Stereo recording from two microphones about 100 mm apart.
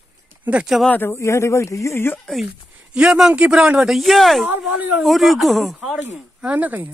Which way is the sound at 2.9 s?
5° right (ahead or behind).